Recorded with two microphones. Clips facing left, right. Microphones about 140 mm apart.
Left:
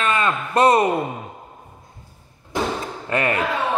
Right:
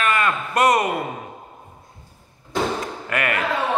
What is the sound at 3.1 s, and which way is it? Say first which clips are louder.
Speech: left 3 dB; 30° left (ahead or behind).